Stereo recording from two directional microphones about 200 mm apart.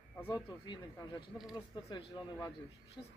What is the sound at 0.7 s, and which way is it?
Speech, 25° left (ahead or behind).